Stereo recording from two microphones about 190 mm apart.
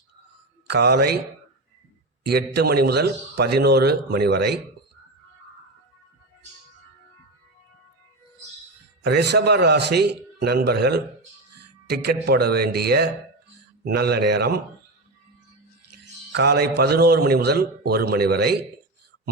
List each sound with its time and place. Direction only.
0.7 s a man's voice: 60° right (ahead or behind)
2.2 s a man's voice: 60° right (ahead or behind)
9.0 s a man's voice: 60° right (ahead or behind)
16.3 s a man's voice: 60° right (ahead or behind)